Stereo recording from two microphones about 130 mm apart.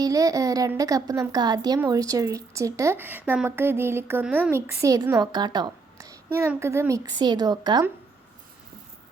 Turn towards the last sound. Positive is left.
turn(degrees=-35)  # may be behind; listen again after turning